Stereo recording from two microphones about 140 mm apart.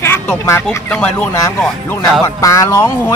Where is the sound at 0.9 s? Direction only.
10° left (ahead or behind).